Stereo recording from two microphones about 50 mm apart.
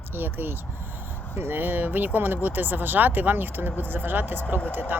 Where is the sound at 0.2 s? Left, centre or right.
Right.